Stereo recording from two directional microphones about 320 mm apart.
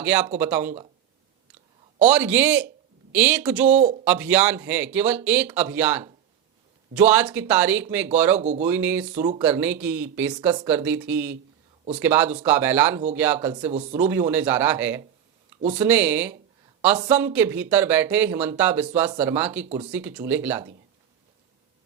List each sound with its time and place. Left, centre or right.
0.0 s speech: centre
2.0 s speech: centre
3.8 s speech: right
4.0 s speech: centre
8.4 s speech: right
8.6 s speech: centre
9.1 s speech: right
9.4 s speech: centre